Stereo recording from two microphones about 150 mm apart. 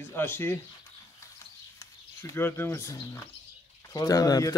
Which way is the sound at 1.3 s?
20° left (ahead or behind).